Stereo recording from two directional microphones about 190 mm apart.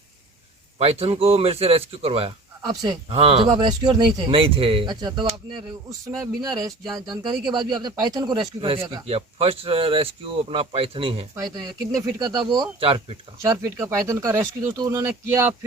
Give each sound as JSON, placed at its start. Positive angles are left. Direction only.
{"t": 0.8, "sound": "a man's voice", "side_deg": -30}